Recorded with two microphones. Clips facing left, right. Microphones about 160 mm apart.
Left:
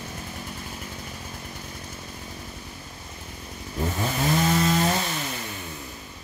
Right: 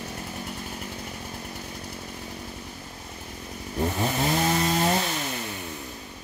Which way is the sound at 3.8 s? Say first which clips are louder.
Right 1 dB; 20° right (ahead or behind).